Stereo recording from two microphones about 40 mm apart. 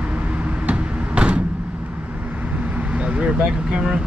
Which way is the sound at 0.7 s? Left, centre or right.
Right.